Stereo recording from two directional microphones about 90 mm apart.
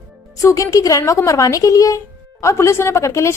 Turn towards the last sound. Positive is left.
turn(degrees=35)  # may be behind; listen again after turning